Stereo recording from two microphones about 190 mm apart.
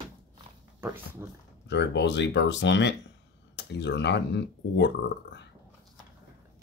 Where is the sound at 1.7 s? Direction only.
65° left (ahead or behind).